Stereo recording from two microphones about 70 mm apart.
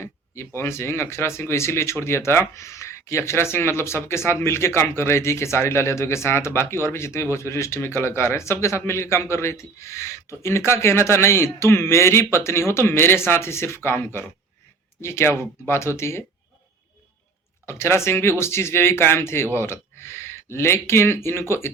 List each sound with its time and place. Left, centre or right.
0.0 s speech: left
17.7 s speech: left